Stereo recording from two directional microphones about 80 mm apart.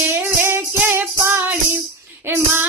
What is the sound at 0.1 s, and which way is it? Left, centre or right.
Music, right.